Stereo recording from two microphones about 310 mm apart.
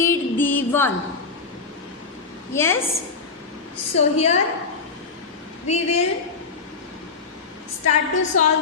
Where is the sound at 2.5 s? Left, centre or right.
Centre.